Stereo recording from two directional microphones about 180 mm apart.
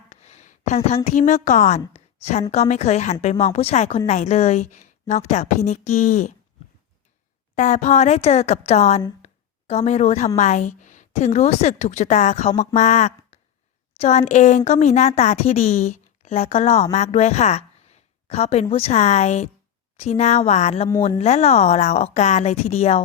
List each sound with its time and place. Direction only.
0.1 s a woman's voice: 40° left (ahead or behind)
1.9 s a sound: 35° left (ahead or behind)
2.5 s speech: 40° left (ahead or behind)
7.5 s speech: 40° left (ahead or behind)
9.2 s a sound: 35° left (ahead or behind)
10.3 s a woman's voice: 40° left (ahead or behind)